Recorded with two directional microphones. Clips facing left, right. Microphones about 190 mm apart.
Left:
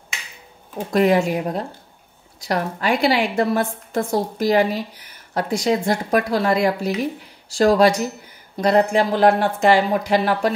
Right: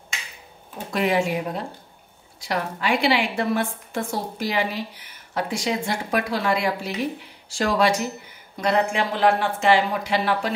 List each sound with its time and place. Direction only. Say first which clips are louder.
0.9 s a woman's voice: left 5 dB; 40° left (ahead or behind)